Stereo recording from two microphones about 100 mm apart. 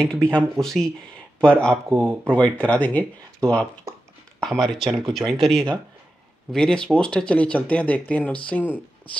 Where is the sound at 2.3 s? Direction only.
10° left (ahead or behind).